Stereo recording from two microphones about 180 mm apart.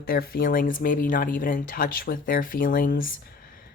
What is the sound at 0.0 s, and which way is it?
Speech, 55° left (ahead or behind).